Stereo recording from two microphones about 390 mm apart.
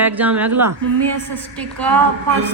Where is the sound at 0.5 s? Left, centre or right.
Right.